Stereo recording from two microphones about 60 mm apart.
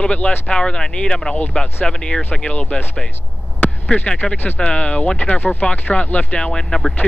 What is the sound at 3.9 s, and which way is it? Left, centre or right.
Speech, centre.